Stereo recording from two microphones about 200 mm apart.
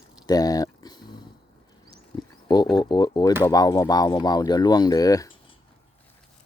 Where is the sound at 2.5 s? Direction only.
20° left (ahead or behind).